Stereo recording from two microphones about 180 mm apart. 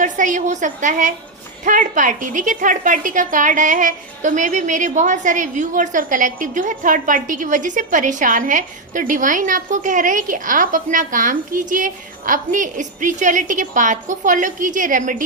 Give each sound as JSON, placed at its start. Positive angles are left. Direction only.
{"t": 0.0, "sound": "a woman's voice", "side_deg": -45}